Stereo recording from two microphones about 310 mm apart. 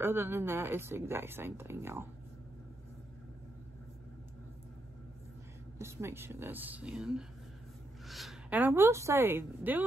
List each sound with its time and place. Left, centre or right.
0.0 s speech: centre
5.8 s speech: centre